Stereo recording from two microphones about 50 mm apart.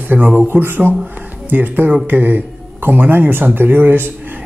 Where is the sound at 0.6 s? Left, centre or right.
Right.